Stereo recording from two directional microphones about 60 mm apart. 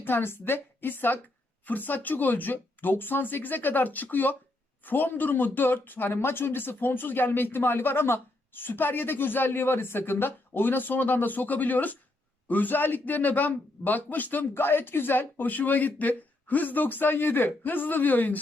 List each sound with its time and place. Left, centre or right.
0.0 s speech: left